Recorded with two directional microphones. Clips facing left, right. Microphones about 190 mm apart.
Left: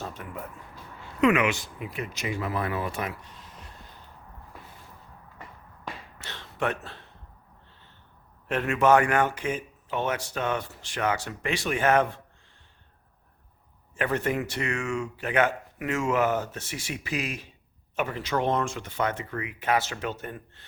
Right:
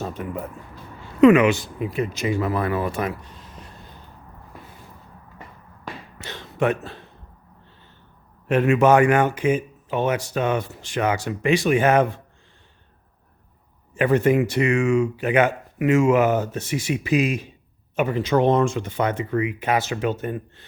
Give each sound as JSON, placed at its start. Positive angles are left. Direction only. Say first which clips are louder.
{"t": 0.0, "sound": "speech", "louder": "right 8 dB", "side_deg": -20}
{"t": 1.2, "sound": "speech", "louder": "right 9 dB", "side_deg": -35}
{"t": 6.1, "sound": "a sound", "louder": "right 8 dB", "side_deg": -15}
{"t": 8.4, "sound": "speech", "louder": "right 5 dB", "side_deg": -15}
{"t": 13.9, "sound": "speech", "louder": "right 9 dB", "side_deg": -15}